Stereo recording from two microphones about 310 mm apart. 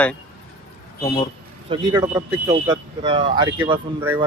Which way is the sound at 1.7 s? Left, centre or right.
Centre.